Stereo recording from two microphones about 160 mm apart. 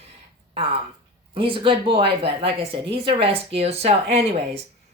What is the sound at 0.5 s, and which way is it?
A woman's voice, 35° right (ahead or behind).